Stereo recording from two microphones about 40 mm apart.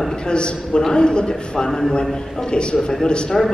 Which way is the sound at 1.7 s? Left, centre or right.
Centre.